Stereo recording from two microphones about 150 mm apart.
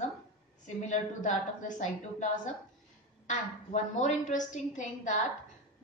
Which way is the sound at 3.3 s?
50° left (ahead or behind).